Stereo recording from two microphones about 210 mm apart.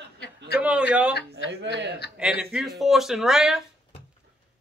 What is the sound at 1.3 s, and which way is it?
Speech, 60° right (ahead or behind).